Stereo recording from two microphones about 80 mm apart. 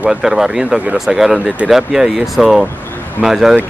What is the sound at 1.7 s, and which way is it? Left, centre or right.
Speech, centre.